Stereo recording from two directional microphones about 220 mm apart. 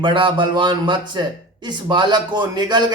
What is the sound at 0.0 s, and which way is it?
A man's voice, 20° right (ahead or behind).